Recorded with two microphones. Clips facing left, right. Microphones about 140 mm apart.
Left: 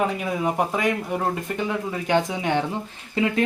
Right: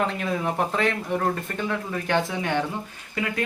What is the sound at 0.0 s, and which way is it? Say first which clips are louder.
Speech: left 2 dB; 10° left (ahead or behind).